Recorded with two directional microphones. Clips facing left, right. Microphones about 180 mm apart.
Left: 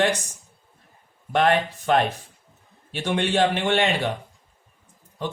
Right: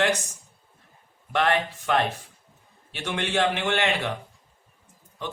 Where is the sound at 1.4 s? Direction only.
45° left (ahead or behind).